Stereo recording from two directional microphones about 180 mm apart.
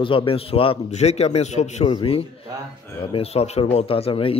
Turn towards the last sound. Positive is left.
turn(degrees=30)  # may be behind; listen again after turning